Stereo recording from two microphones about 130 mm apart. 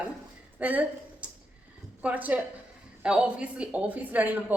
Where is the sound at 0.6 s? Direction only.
10° right (ahead or behind).